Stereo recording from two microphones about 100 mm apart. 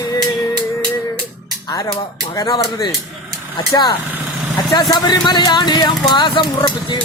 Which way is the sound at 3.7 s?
50° left (ahead or behind).